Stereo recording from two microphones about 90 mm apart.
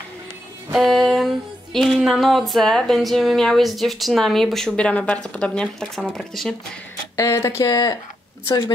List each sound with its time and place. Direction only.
0.7 s a sound: centre (ahead or behind)
4.7 s speech: 15° left (ahead or behind)
7.2 s speech: 35° left (ahead or behind)